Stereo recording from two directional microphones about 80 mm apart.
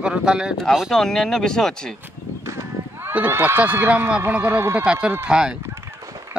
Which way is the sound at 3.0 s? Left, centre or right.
Right.